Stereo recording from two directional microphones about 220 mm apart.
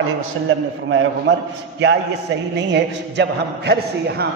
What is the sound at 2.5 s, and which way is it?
A man's voice, 55° right (ahead or behind).